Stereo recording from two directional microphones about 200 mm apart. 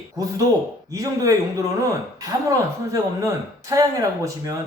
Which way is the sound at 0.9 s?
15° right (ahead or behind).